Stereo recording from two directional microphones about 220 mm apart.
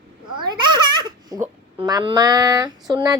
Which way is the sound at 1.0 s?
20° right (ahead or behind).